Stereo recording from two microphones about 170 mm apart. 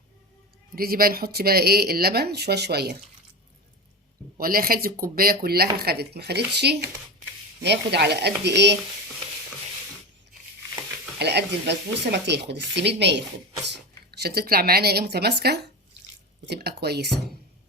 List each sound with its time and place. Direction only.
0.8 s speech: 60° right (ahead or behind)
4.4 s speech: 60° right (ahead or behind); by 8.7 s 90° right
11.2 s speech: 80° right
14.1 s speech: 65° right (ahead or behind)